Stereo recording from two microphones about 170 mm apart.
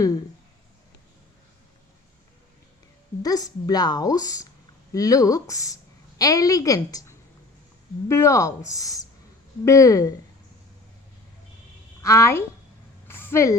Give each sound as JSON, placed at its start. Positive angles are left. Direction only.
{"t": 3.2, "sound": "a woman's voice", "side_deg": 20}
{"t": 12.0, "sound": "a woman's voice", "side_deg": 15}
{"t": 13.1, "sound": "a sound", "side_deg": 10}